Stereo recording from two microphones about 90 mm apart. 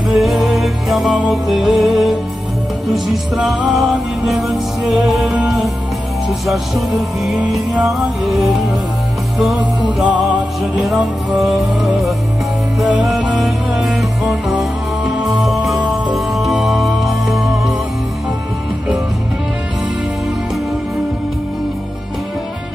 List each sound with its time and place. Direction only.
0.1 s music: centre (ahead or behind)
7.8 s music: centre (ahead or behind)
9.6 s music: 15° right (ahead or behind)
10.8 s music: centre (ahead or behind)